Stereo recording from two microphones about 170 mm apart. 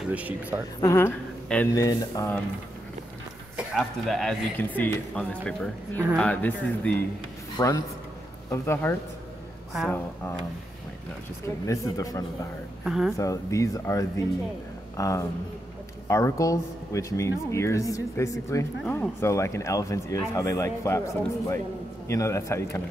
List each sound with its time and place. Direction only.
0.1 s speech: 10° right (ahead or behind)
0.7 s speech: 15° left (ahead or behind)
3.5 s speech: centre (ahead or behind)
7.5 s a man's voice: 20° left (ahead or behind)
9.7 s a woman's voice: centre (ahead or behind)
11.4 s speech: 20° left (ahead or behind)
12.8 s speech: centre (ahead or behind)
13.1 s speech: 20° left (ahead or behind)